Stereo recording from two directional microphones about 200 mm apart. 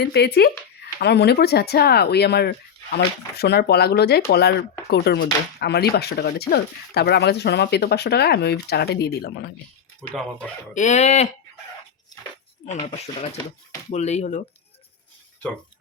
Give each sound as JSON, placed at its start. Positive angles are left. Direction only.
{"t": 0.0, "sound": "speech", "side_deg": 55}
{"t": 10.0, "sound": "speech", "side_deg": 5}
{"t": 10.8, "sound": "fowl", "side_deg": 35}
{"t": 12.8, "sound": "fowl", "side_deg": 35}